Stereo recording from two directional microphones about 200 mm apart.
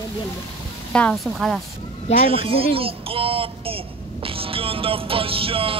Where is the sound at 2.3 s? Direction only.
30° right (ahead or behind).